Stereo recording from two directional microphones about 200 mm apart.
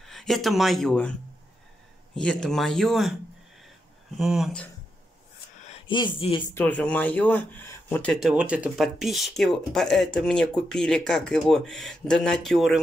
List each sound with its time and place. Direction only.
0.0 s speech: centre (ahead or behind)
2.1 s speech: 5° left (ahead or behind)
4.2 s speech: centre (ahead or behind)
5.9 s speech: 25° left (ahead or behind)
6.5 s speech: 10° left (ahead or behind)